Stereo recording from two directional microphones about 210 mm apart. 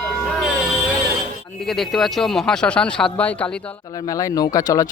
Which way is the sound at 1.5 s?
Centre (ahead or behind).